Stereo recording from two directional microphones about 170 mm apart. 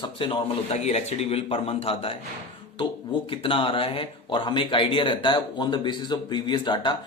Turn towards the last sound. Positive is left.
turn(degrees=25)  # may be behind; listen again after turning